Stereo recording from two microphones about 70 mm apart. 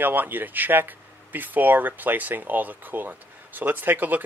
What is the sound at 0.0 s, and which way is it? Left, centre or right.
Speech, right.